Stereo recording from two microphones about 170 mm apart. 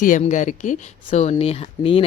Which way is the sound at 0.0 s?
50° left (ahead or behind).